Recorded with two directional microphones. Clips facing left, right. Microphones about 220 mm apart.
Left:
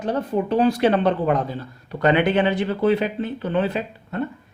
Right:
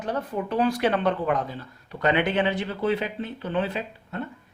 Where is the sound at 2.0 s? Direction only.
50° left (ahead or behind).